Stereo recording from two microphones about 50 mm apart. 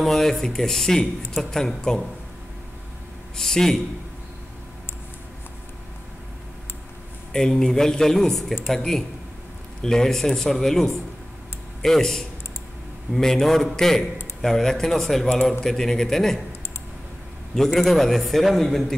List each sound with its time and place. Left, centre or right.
0.0 s speech: centre
3.3 s speech: centre
7.3 s speech: centre
17.6 s a man's voice: centre